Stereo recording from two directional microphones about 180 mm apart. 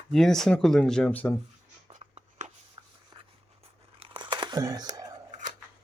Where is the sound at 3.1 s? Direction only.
30° right (ahead or behind).